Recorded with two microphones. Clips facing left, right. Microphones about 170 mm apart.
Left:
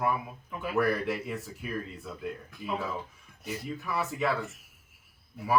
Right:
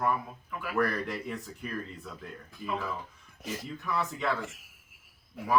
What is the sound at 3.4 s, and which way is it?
Speech, 90° right.